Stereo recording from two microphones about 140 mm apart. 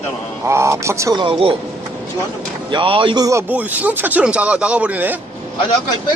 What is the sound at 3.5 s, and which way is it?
Speech, 10° right (ahead or behind).